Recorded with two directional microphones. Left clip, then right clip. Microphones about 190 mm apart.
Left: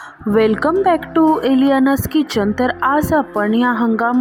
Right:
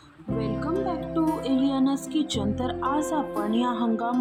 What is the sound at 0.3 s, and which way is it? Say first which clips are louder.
Speech: left 14 dB; 40° left (ahead or behind).